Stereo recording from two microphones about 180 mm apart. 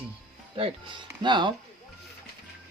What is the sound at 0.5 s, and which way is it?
Speech, 30° right (ahead or behind).